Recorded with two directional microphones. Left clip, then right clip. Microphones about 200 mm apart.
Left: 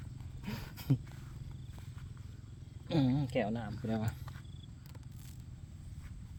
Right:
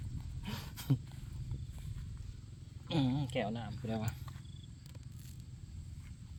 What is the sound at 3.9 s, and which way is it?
Speech, 30° left (ahead or behind).